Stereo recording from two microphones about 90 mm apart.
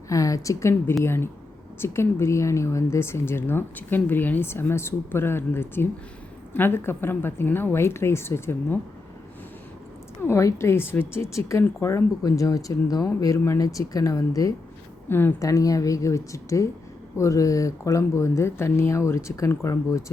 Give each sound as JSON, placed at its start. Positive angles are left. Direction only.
{"t": 0.1, "sound": "a woman's voice", "side_deg": 40}
{"t": 10.2, "sound": "a woman's voice", "side_deg": 30}
{"t": 15.1, "sound": "a woman's voice", "side_deg": 25}
{"t": 15.4, "sound": "speech", "side_deg": 40}